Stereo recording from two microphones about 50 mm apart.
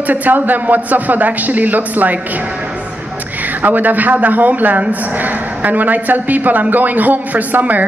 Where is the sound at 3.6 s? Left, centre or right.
Right.